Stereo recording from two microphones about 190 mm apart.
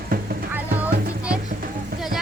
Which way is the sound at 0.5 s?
10° right (ahead or behind).